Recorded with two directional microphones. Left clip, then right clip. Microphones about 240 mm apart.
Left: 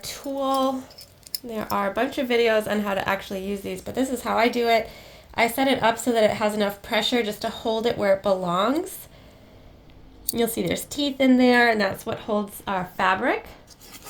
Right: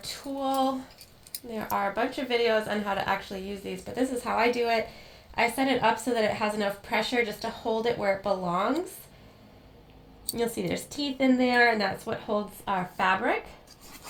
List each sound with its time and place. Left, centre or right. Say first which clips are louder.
0.0 s a sound: left 5 dB; left
1.5 s speech: left 3 dB; left
10.3 s speech: left 5 dB; left